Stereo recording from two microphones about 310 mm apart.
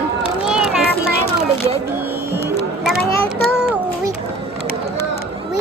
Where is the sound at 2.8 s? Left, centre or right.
Centre.